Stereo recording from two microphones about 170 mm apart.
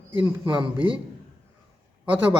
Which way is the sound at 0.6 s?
30° right (ahead or behind).